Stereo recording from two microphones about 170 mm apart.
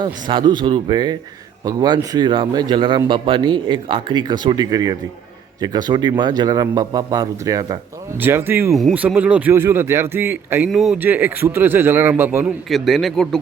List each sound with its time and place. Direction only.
0.0 s speech: 25° right (ahead or behind)
8.7 s speech: 5° right (ahead or behind)
10.7 s speech: centre (ahead or behind)
12.7 s a man's voice: centre (ahead or behind)